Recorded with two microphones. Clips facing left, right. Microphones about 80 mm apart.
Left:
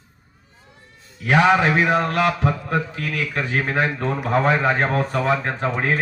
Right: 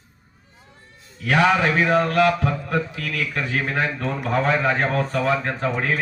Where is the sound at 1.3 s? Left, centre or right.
Centre.